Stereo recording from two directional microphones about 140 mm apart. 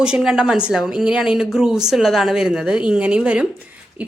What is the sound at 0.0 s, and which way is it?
A woman's voice, 5° right (ahead or behind).